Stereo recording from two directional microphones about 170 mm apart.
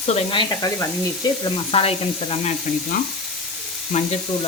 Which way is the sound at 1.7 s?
35° left (ahead or behind).